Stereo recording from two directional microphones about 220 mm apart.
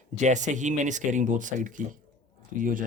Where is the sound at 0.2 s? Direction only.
35° right (ahead or behind).